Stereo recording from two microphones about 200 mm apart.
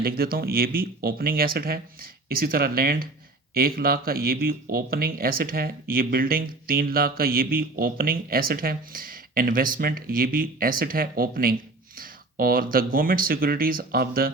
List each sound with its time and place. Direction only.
0.0 s speech: 50° right (ahead or behind)